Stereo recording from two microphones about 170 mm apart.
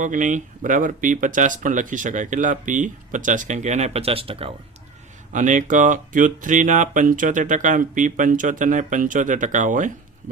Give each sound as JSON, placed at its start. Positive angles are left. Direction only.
{"t": 0.0, "sound": "speech", "side_deg": -50}
{"t": 5.3, "sound": "speech", "side_deg": -50}